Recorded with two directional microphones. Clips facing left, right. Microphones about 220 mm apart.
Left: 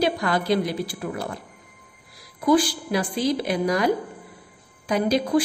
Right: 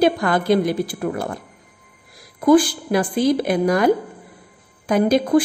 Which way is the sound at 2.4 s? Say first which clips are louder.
Right 5 dB; 50° right (ahead or behind).